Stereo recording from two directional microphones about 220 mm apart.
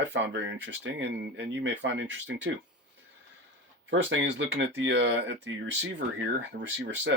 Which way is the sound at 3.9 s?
55° right (ahead or behind).